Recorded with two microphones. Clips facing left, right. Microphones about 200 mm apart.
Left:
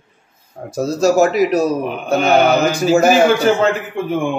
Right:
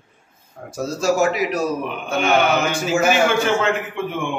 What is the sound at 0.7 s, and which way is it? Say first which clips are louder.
A man's voice: left 5 dB; 40° left (ahead or behind).